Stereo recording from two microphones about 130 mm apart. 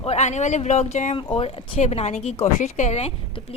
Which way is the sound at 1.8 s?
55° left (ahead or behind).